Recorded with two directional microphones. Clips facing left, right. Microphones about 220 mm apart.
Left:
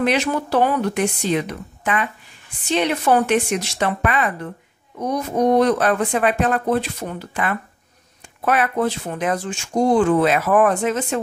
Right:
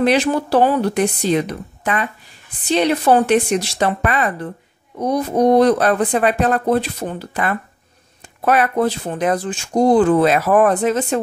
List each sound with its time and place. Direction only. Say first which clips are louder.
0.0 s speech: right 4 dB; 35° right (ahead or behind)